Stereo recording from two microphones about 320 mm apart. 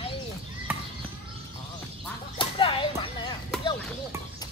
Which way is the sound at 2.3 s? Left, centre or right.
Centre.